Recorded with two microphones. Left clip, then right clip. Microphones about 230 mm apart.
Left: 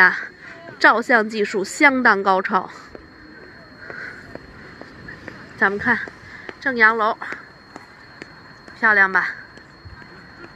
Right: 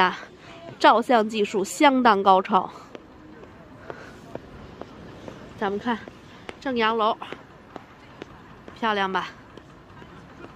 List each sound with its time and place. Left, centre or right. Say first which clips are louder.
0.0 s a woman's voice: left 7 dB; centre
5.6 s a woman's voice: left 9 dB; centre
7.2 s a sound: left 7 dB; left
8.7 s a woman's voice: left 9 dB; centre